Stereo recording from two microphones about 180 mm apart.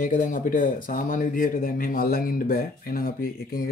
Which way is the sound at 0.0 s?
45° left (ahead or behind).